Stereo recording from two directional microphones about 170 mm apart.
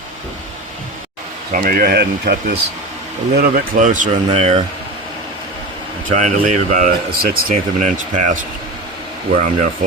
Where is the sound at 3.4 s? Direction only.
55° right (ahead or behind); by 4.6 s 35° right (ahead or behind).